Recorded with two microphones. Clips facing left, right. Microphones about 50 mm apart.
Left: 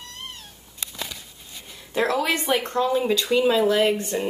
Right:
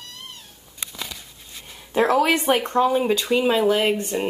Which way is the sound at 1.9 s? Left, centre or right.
Right.